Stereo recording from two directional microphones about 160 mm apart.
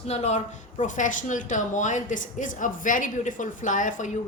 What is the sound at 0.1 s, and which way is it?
Speech, 45° left (ahead or behind).